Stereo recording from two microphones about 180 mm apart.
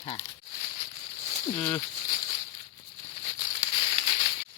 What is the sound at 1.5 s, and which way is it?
Speech, 10° left (ahead or behind).